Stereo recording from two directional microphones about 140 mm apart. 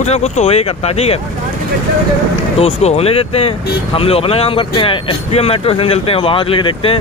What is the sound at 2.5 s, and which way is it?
Speech, 45° left (ahead or behind).